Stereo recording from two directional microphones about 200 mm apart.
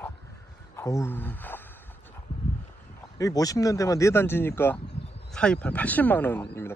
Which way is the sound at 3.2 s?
15° left (ahead or behind).